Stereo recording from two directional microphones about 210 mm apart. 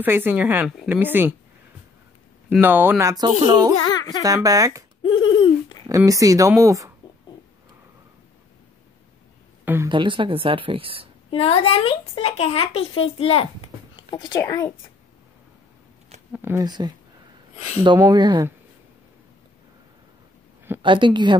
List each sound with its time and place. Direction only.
0.0 s a woman's voice: 10° right (ahead or behind)
2.6 s a woman's voice: 10° right (ahead or behind)
3.9 s a sound: 20° left (ahead or behind)
4.2 s a woman's voice: 15° right (ahead or behind)
5.0 s laughter: 25° left (ahead or behind)
5.9 s a woman's voice: 15° right (ahead or behind)
9.8 s speech: 25° right (ahead or behind)
11.2 s a child's voice: 25° left (ahead or behind)
16.3 s a woman's voice: 10° right (ahead or behind)
20.8 s speech: 20° right (ahead or behind)